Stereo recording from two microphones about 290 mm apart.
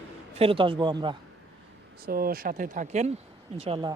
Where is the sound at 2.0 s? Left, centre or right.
Right.